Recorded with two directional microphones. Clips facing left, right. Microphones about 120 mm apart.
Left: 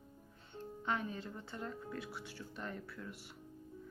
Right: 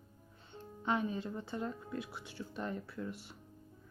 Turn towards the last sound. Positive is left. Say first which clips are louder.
# right 5 dB
turn(degrees=-25)  # may be behind; listen again after turning